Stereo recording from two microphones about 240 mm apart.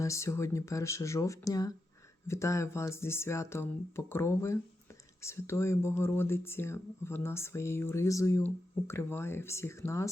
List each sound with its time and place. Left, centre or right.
0.0 s speech: centre